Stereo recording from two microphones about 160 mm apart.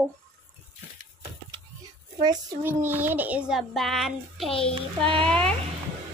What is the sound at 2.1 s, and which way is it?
Speech, 25° right (ahead or behind).